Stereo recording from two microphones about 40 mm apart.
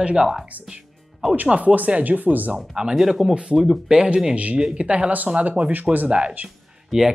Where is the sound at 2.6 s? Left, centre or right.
Centre.